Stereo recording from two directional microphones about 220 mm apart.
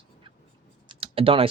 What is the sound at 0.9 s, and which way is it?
Computer keyboard, 25° right (ahead or behind).